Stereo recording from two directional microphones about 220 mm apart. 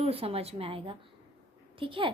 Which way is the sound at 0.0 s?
25° right (ahead or behind).